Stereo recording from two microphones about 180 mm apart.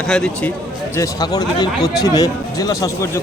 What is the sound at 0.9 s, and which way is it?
Speech, 20° left (ahead or behind).